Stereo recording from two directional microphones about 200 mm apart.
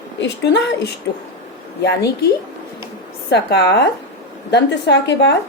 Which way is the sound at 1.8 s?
55° left (ahead or behind).